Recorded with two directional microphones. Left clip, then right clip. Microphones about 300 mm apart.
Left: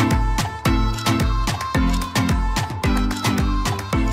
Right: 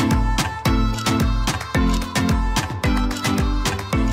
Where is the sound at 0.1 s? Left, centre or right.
Centre.